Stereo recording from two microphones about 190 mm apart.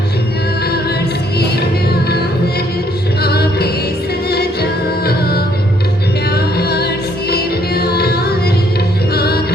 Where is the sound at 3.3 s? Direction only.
55° left (ahead or behind).